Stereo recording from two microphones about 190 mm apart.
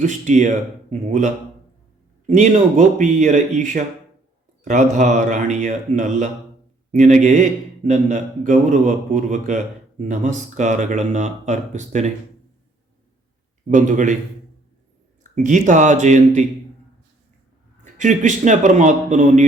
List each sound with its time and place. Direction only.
0.0 s a man's voice: 40° right (ahead or behind)
13.7 s a man's voice: 40° right (ahead or behind)
15.2 s a man's voice: 40° right (ahead or behind)
17.9 s a man's voice: 40° right (ahead or behind)